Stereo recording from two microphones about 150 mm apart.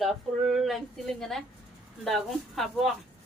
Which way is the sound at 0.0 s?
Centre (ahead or behind).